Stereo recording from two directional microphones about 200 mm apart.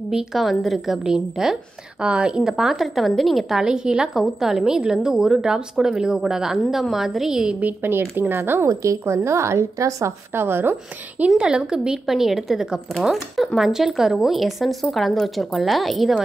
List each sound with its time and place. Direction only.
0.1 s a woman's voice: centre (ahead or behind)